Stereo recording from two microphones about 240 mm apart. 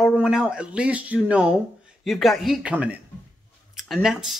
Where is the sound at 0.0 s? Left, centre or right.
Centre.